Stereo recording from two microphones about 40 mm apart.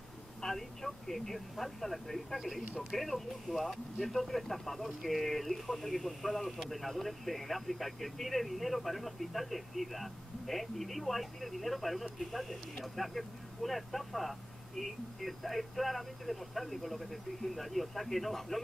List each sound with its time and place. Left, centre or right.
0.4 s speech: centre